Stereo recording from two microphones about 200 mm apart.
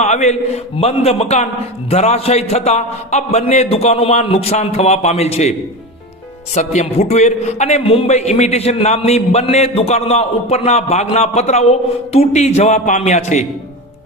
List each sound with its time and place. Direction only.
0.0 s a man's voice: 35° left (ahead or behind)